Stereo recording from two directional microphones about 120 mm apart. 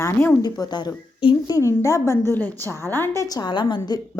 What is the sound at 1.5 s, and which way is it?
A woman's voice, 25° left (ahead or behind).